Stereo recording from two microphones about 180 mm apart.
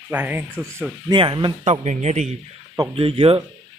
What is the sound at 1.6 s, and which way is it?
Speech, 40° right (ahead or behind).